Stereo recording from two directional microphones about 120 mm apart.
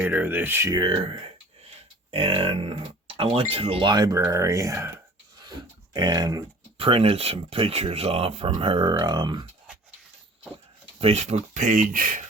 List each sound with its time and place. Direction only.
0.0 s speech: 15° right (ahead or behind)
0.7 s speech: 40° right (ahead or behind)
2.0 s speech: 50° right (ahead or behind); by 4.9 s 25° right (ahead or behind)
5.9 s speech: 35° right (ahead or behind)
6.7 s speech: 50° right (ahead or behind)
8.9 s speech: 35° right (ahead or behind)
11.0 s speech: 65° right (ahead or behind); by 12.2 s 90° right